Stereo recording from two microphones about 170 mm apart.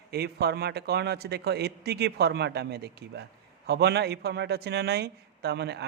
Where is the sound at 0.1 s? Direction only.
75° right (ahead or behind).